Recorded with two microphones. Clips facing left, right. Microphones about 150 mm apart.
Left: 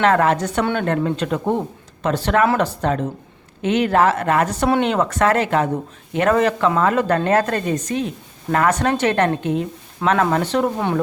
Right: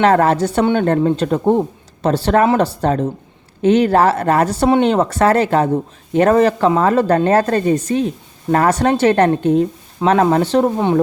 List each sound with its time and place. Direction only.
0.0 s speech: 35° right (ahead or behind)